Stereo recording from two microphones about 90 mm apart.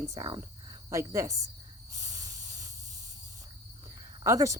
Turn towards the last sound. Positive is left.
turn(degrees=-35)  # may be behind; listen again after turning